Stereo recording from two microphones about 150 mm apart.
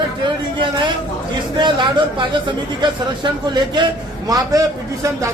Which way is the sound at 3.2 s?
30° right (ahead or behind).